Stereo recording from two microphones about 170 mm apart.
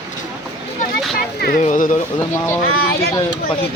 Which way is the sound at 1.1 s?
60° left (ahead or behind).